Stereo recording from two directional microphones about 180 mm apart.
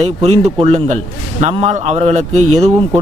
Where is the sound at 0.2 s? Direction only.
35° right (ahead or behind).